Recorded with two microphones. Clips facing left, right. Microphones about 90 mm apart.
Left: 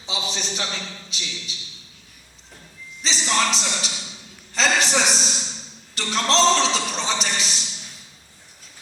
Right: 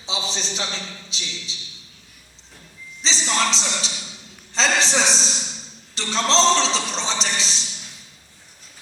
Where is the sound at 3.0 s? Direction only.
30° right (ahead or behind).